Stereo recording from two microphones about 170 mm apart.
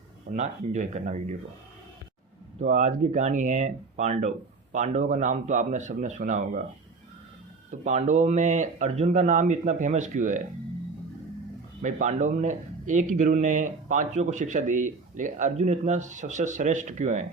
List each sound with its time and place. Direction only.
0.3 s a man's voice: 45° right (ahead or behind)
2.6 s a man's voice: 45° right (ahead or behind)
7.7 s a man's voice: 45° right (ahead or behind)
11.8 s a man's voice: 45° right (ahead or behind)